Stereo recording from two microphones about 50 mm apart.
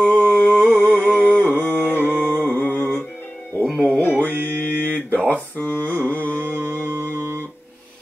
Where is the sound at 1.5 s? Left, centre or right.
Left.